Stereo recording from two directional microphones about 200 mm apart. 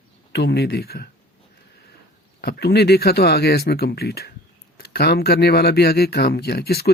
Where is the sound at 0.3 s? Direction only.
55° left (ahead or behind).